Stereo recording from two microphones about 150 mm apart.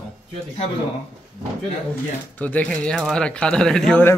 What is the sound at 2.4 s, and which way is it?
Speech, 10° left (ahead or behind).